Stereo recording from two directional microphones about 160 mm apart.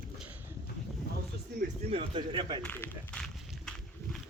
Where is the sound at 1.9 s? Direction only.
35° right (ahead or behind).